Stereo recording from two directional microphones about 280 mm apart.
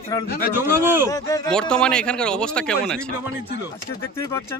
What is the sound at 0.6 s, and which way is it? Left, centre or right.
Speech, centre.